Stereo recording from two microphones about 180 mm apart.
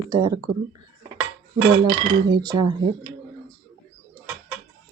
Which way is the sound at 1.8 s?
25° right (ahead or behind).